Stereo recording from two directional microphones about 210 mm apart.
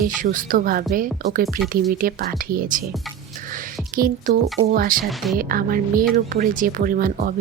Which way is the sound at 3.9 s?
40° right (ahead or behind).